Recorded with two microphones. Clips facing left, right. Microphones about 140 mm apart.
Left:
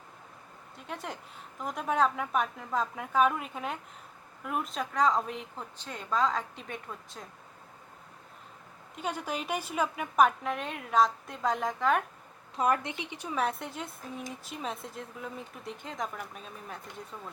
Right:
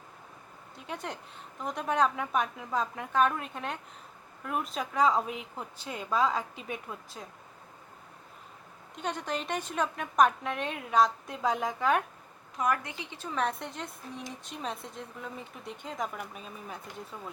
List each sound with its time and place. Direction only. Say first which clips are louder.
0.8 s a woman's voice: right 1 dB; centre (ahead or behind)
9.0 s a woman's voice: even; 5° left (ahead or behind)
12.5 s a woman's voice: left 2 dB; 25° left (ahead or behind); by 17.3 s centre (ahead or behind)